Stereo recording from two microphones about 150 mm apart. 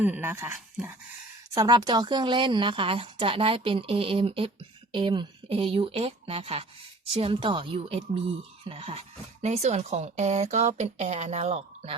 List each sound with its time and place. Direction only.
0.0 s speech: 10° right (ahead or behind)
1.5 s a woman's voice: 25° right (ahead or behind); by 11.9 s 45° right (ahead or behind)